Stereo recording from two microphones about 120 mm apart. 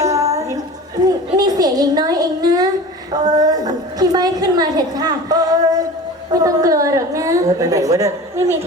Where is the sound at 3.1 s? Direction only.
35° right (ahead or behind).